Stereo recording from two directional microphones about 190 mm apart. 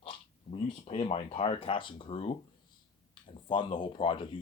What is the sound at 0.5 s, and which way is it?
Speech, 30° left (ahead or behind).